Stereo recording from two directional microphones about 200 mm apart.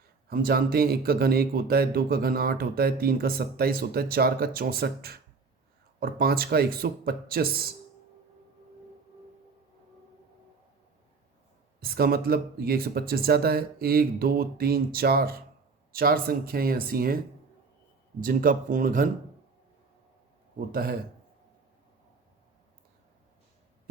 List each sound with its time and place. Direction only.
0.3 s speech: 50° right (ahead or behind)
11.8 s speech: 50° right (ahead or behind)
18.2 s speech: 45° right (ahead or behind)